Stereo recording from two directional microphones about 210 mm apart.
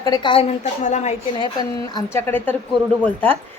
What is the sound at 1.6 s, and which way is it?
A woman's voice, 15° left (ahead or behind).